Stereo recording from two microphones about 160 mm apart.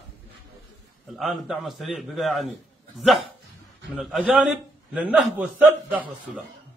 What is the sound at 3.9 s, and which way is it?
A man's voice, 5° right (ahead or behind).